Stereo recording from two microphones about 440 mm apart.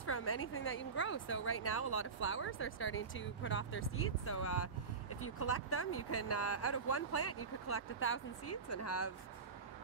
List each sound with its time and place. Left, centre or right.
0.0 s speech: left